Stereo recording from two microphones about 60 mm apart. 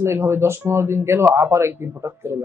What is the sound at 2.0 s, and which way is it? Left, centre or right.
Speech, right.